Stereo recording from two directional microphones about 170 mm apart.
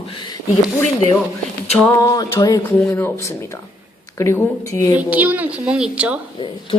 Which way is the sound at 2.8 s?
15° left (ahead or behind).